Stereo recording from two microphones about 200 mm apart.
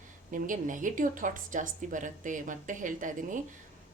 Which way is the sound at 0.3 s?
40° right (ahead or behind).